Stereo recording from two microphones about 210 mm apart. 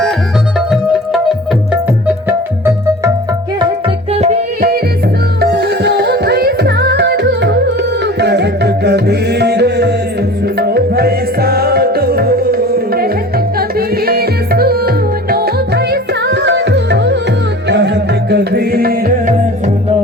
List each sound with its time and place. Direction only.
2.2 s music: 10° right (ahead or behind)
3.6 s music: 25° right (ahead or behind)
5.4 s music: 50° right (ahead or behind)